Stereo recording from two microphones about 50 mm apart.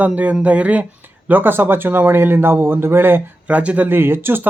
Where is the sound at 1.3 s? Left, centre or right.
Right.